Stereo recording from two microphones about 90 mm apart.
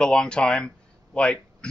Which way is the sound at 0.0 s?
10° left (ahead or behind).